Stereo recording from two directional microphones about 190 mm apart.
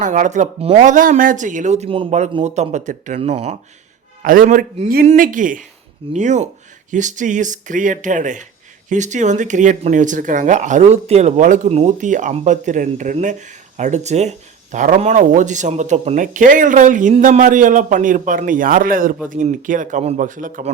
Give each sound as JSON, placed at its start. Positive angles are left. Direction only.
{"t": 0.0, "sound": "speech", "side_deg": -40}
{"t": 4.2, "sound": "speech", "side_deg": -45}